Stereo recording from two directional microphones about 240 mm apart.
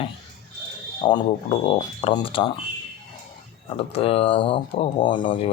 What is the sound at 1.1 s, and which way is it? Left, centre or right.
Speech, centre.